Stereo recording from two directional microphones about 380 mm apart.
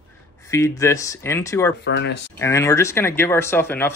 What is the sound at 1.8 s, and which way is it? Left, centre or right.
Speech, left.